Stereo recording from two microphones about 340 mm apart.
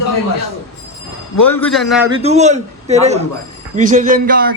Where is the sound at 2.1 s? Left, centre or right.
Centre.